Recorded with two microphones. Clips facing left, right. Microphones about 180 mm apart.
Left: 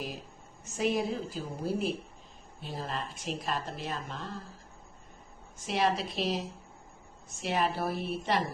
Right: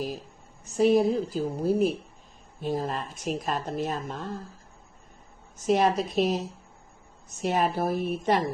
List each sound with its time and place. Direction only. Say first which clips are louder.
0.6 s a woman's voice: right 9 dB; 40° right (ahead or behind)
5.6 s speech: right 6 dB; 45° right (ahead or behind)
7.4 s speech: right 5 dB; 45° right (ahead or behind)